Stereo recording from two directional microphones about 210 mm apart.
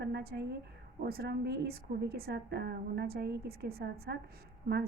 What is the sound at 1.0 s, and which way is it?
A woman's voice, 50° right (ahead or behind).